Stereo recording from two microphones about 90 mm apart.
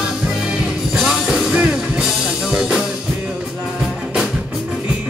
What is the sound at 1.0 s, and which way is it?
Music, 5° right (ahead or behind).